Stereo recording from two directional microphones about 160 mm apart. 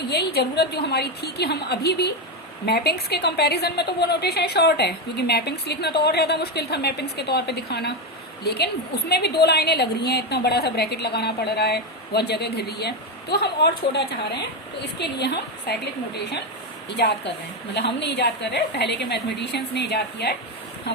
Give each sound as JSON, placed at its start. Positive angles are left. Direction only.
{"t": 0.1, "sound": "a woman's voice", "side_deg": 85}
{"t": 18.0, "sound": "a woman's voice", "side_deg": 90}